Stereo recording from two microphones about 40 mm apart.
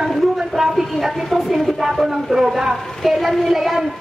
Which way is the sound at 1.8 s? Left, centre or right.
Centre.